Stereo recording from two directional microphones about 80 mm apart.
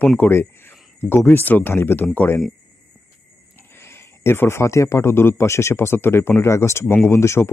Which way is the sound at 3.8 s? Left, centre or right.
Left.